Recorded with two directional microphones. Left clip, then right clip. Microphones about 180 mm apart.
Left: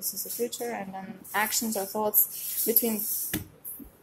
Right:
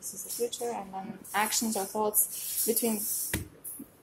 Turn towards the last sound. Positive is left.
turn(degrees=5)  # may be behind; listen again after turning